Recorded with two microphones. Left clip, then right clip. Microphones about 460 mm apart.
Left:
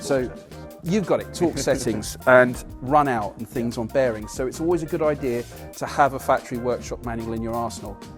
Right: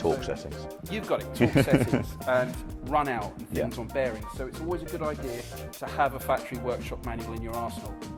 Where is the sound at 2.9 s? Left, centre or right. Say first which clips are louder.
Left 8 dB; left.